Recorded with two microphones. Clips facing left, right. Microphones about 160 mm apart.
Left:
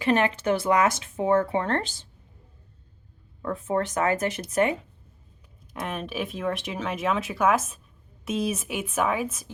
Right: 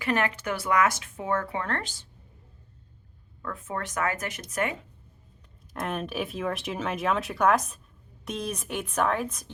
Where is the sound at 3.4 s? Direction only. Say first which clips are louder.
Left 8 dB; 30° left (ahead or behind).